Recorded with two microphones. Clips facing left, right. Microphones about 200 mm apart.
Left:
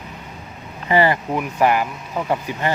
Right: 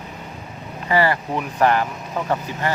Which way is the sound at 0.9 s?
20° left (ahead or behind).